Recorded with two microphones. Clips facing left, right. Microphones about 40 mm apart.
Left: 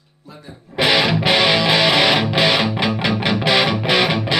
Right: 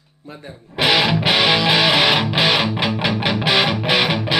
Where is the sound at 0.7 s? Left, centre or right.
Centre.